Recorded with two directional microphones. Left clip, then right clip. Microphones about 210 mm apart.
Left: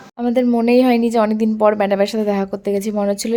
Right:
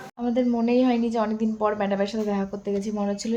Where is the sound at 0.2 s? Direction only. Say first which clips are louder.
Left 8 dB; 50° left (ahead or behind).